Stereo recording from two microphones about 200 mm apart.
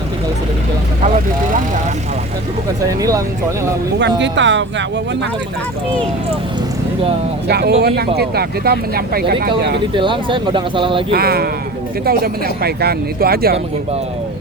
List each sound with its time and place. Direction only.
1.0 s speech: 40° right (ahead or behind)
3.0 s speech: 15° right (ahead or behind)
4.2 s speech: 65° right (ahead or behind)
7.4 s speech: 55° right (ahead or behind)
9.9 s speech: 25° right (ahead or behind)
11.1 s speech: 50° right (ahead or behind)